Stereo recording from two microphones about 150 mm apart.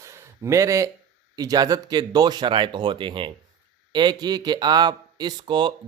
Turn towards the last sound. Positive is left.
turn(degrees=-30)  # may be behind; listen again after turning